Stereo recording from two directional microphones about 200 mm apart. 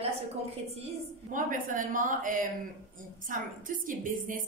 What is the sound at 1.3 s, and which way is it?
A woman's voice, 40° right (ahead or behind).